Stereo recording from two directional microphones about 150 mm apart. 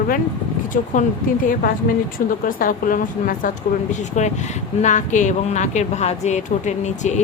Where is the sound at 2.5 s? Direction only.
65° left (ahead or behind).